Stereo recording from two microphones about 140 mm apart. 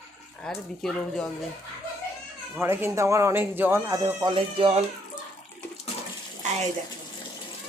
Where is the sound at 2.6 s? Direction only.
15° right (ahead or behind).